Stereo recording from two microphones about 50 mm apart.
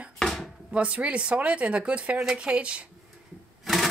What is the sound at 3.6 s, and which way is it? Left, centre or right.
Printer, centre.